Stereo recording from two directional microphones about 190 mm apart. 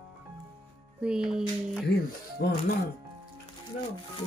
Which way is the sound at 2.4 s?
60° left (ahead or behind).